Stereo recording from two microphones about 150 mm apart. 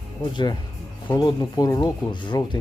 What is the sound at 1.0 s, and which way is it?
Speech, 30° left (ahead or behind).